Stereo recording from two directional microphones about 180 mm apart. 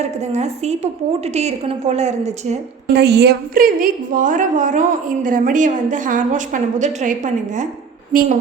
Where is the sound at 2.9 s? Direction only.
65° right (ahead or behind).